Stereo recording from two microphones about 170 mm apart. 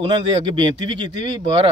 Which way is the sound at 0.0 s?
25° right (ahead or behind).